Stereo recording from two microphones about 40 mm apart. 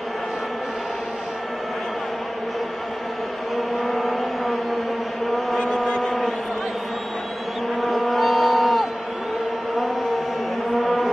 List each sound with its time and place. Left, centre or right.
3.5 s vehicle: centre
5.6 s vehicle: centre
7.8 s vehicle: centre
10.8 s a sound: centre